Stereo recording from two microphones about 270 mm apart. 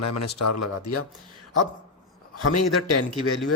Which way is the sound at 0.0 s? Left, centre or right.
Left.